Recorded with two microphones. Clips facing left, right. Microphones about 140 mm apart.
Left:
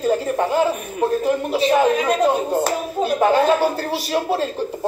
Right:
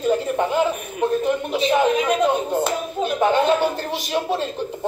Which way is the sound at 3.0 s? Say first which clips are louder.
Left 2 dB; 40° left (ahead or behind).